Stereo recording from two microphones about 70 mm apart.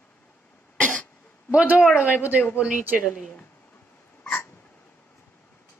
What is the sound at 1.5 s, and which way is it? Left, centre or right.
Speech, centre.